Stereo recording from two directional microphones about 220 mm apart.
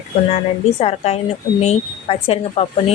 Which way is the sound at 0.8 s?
30° left (ahead or behind).